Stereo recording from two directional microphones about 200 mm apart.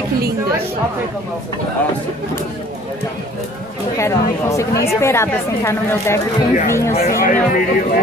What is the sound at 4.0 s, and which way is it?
A woman's voice, 15° left (ahead or behind).